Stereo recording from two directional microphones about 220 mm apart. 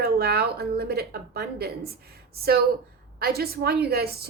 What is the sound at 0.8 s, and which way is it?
A woman's voice, 45° right (ahead or behind).